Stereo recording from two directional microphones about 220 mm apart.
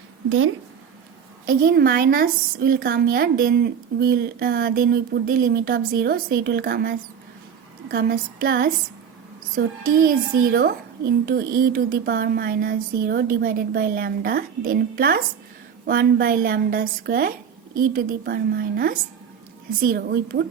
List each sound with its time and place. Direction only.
0.3 s speech: 65° right (ahead or behind)
1.5 s a woman's voice: 40° right (ahead or behind)